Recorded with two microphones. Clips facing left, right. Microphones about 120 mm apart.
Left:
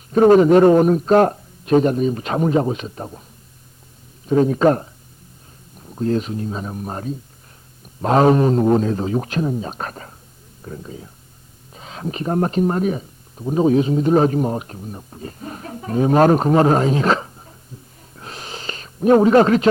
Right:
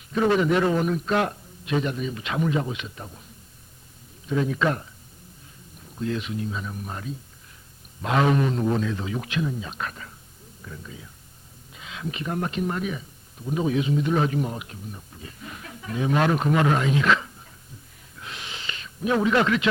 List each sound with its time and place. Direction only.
0.1 s speech: 40° left (ahead or behind)
4.3 s speech: 40° left (ahead or behind)
5.9 s speech: 40° left (ahead or behind)
18.2 s a sound: 40° left (ahead or behind)